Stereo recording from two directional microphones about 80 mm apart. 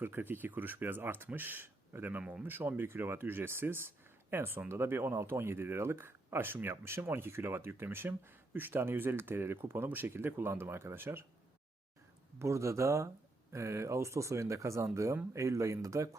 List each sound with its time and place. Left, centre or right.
0.0 s speech: right
2.2 s speech: centre
2.5 s speech: right
12.4 s speech: right